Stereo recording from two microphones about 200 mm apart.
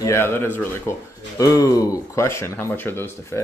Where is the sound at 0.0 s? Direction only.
15° left (ahead or behind).